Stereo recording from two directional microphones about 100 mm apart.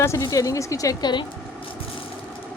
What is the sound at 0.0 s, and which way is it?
A woman's voice, 30° left (ahead or behind).